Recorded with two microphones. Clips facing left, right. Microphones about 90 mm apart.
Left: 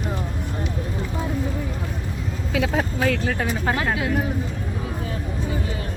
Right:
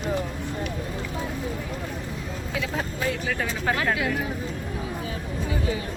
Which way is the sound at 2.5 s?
90° left.